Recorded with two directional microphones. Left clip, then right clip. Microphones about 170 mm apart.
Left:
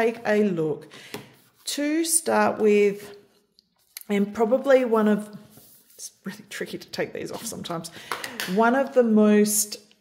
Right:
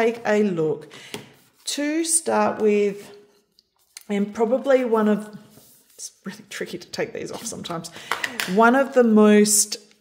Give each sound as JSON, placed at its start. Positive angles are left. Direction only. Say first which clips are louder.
{"t": 0.0, "sound": "speech", "louder": "right 2 dB", "side_deg": -5}
{"t": 8.5, "sound": "speech", "louder": "right 4 dB", "side_deg": -15}